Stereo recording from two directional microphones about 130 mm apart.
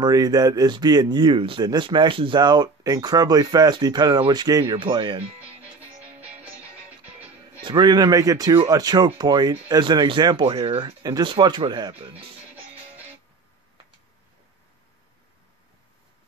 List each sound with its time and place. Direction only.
0.0 s speech: 30° right (ahead or behind)
4.7 s speech: 40° right (ahead or behind)
7.2 s speech: 35° right (ahead or behind)